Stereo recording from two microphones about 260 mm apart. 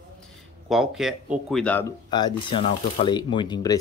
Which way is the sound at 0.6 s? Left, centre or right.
Centre.